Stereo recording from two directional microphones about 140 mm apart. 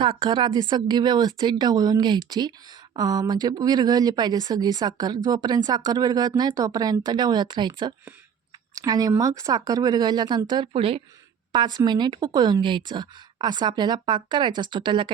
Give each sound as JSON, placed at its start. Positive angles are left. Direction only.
{"t": 0.2, "sound": "speech", "side_deg": -30}
{"t": 8.7, "sound": "speech", "side_deg": -25}